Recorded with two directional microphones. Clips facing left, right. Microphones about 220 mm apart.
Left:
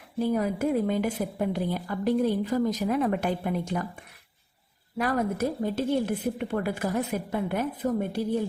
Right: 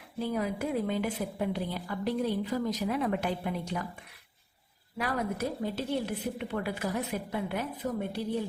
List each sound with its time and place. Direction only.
0.2 s a woman's voice: 45° left (ahead or behind)
4.9 s a woman's voice: 50° left (ahead or behind)